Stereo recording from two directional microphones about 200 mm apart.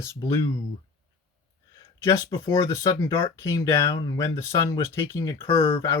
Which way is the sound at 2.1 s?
20° left (ahead or behind).